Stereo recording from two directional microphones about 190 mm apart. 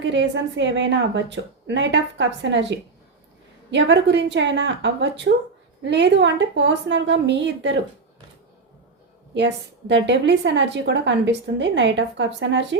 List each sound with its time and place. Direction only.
0.0 s a woman's voice: 70° right (ahead or behind)
9.3 s a woman's voice: 70° right (ahead or behind)